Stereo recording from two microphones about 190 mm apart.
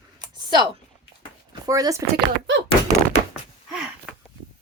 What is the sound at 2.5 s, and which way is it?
Speech, 70° right (ahead or behind).